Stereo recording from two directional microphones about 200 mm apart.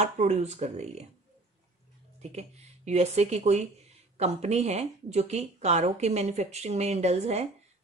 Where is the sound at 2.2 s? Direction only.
35° right (ahead or behind).